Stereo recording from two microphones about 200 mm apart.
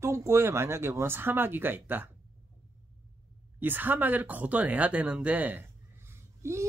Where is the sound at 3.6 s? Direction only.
10° right (ahead or behind).